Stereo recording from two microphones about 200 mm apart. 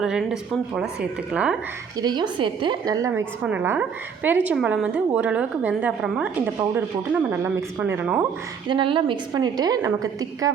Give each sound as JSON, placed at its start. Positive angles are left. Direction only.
{"t": 0.0, "sound": "a woman's voice", "side_deg": -5}
{"t": 2.0, "sound": "a woman's voice", "side_deg": -20}
{"t": 8.7, "sound": "a woman's voice", "side_deg": -25}